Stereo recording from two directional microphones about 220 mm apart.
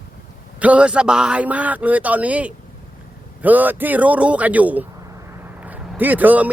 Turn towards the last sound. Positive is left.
turn(degrees=-5)  # may be behind; listen again after turning